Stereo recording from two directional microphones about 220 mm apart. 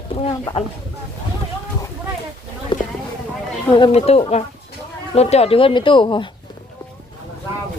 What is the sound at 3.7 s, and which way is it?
Speech, 25° left (ahead or behind).